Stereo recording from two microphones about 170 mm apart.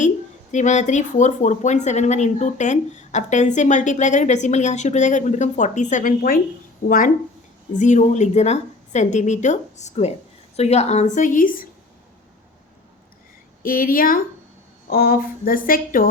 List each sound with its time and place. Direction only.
0.5 s speech: 45° left (ahead or behind)
13.6 s a woman's voice: 55° left (ahead or behind)